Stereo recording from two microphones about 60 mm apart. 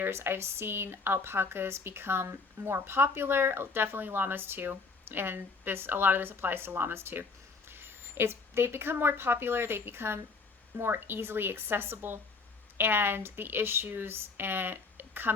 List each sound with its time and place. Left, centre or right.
0.0 s speech: right